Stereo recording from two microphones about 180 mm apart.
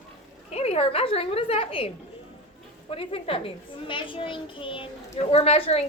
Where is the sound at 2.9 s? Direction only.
30° left (ahead or behind).